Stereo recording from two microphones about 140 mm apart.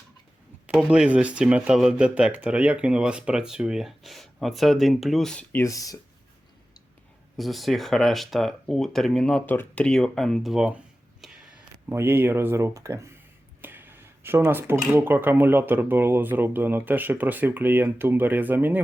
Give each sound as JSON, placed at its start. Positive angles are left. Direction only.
{"t": 0.9, "sound": "speech", "side_deg": -10}
{"t": 7.3, "sound": "speech", "side_deg": 0}
{"t": 11.9, "sound": "speech", "side_deg": -15}
{"t": 13.6, "sound": "a sound", "side_deg": -15}
{"t": 14.9, "sound": "speech", "side_deg": -15}